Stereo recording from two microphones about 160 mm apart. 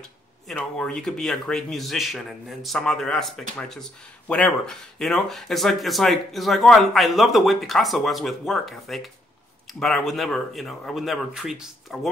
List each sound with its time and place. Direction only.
0.5 s speech: 5° left (ahead or behind)